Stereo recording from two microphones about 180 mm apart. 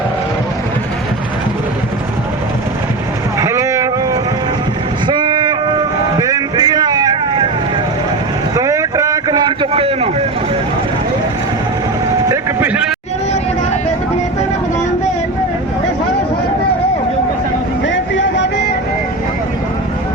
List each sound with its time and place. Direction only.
3.3 s boat: 15° right (ahead or behind)
5.0 s a sound: 25° right (ahead or behind)
8.5 s vehicle: 15° right (ahead or behind); by 10.2 s 35° right (ahead or behind)
12.3 s vehicle: 10° right (ahead or behind)
17.8 s music: 90° left